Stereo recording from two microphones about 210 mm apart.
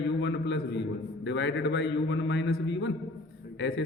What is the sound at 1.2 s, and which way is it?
A man's voice, 60° left (ahead or behind).